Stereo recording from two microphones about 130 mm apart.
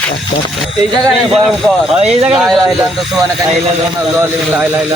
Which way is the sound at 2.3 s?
5° right (ahead or behind).